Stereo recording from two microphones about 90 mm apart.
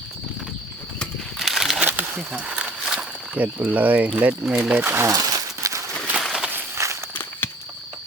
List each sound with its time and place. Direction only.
1.4 s crumpling: centre (ahead or behind)
1.8 s wild animals: 20° right (ahead or behind)
2.5 s a sound: 10° right (ahead or behind)
3.3 s speech: 20° right (ahead or behind)
4.8 s speech: 25° right (ahead or behind)
5.1 s a sound: 45° right (ahead or behind)
6.1 s walk: 5° right (ahead or behind)
6.5 s walk: 30° right (ahead or behind)
7.1 s walk: 25° left (ahead or behind)